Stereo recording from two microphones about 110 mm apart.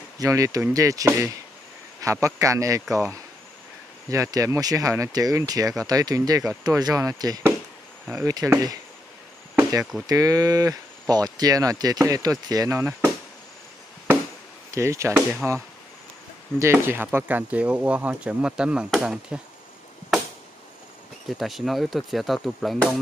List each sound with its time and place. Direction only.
0.2 s a man's voice: 30° right (ahead or behind)
4.1 s a man's voice: 30° right (ahead or behind)
9.6 s chop: 30° right (ahead or behind)
10.0 s speech: 35° right (ahead or behind)
14.7 s a man's voice: 25° right (ahead or behind); by 19.4 s 5° right (ahead or behind)
21.4 s speech: centre (ahead or behind)